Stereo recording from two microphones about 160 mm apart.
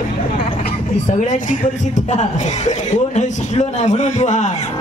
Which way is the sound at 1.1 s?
50° left (ahead or behind).